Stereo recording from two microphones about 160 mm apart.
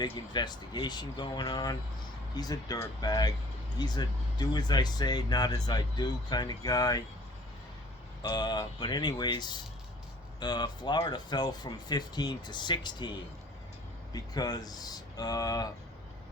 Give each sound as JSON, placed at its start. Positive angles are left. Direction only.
{"t": 0.3, "sound": "speech", "side_deg": 25}
{"t": 8.2, "sound": "speech", "side_deg": 25}